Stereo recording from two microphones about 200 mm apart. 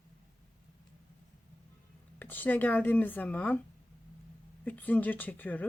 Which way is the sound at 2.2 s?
10° left (ahead or behind).